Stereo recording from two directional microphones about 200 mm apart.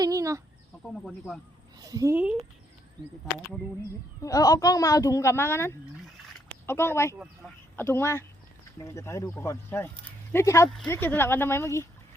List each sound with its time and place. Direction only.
0.0 s speech: 15° right (ahead or behind)
1.8 s speech: 20° right (ahead or behind)
4.2 s speech: 15° left (ahead or behind)